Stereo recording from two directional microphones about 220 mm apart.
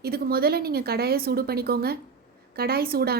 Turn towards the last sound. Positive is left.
turn(degrees=-45)  # may be behind; listen again after turning